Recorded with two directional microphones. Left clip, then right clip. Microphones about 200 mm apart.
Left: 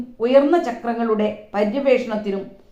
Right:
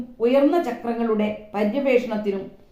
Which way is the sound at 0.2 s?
35° left (ahead or behind).